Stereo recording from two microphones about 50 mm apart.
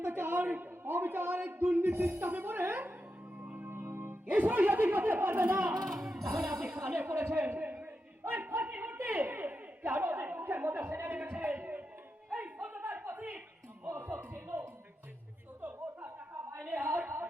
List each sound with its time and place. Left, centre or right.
0.0 s a sound: right
3.3 s music: right
4.3 s speech: right
5.5 s speech: right
5.9 s music: centre
6.7 s speech: right
7.4 s a sound: right
12.6 s chuckle: right
13.8 s music: right
15.6 s a sound: right